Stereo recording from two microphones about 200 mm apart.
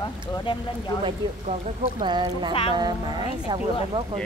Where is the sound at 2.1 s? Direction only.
20° right (ahead or behind).